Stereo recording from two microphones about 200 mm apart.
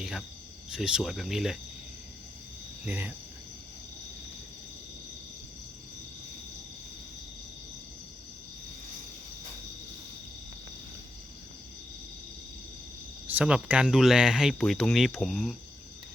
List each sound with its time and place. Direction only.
0.0 s a sound: centre (ahead or behind)
0.7 s speech: 5° right (ahead or behind)
2.8 s speech: 10° right (ahead or behind)
13.2 s speech: 5° right (ahead or behind)